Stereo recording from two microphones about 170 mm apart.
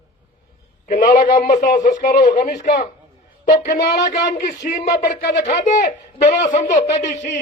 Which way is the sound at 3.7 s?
20° left (ahead or behind).